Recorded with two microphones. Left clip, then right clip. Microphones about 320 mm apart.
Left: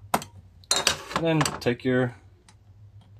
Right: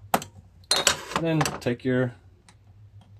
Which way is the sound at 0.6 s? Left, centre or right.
Centre.